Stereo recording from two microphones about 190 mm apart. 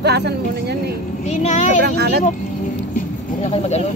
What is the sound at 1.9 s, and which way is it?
Speech, 60° right (ahead or behind).